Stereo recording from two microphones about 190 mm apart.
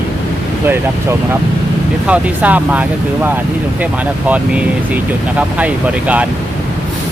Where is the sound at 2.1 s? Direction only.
10° right (ahead or behind).